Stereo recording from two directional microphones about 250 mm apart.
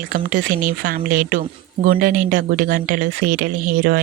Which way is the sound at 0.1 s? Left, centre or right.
Right.